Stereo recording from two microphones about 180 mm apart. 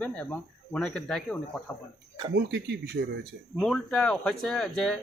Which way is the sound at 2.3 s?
70° right (ahead or behind).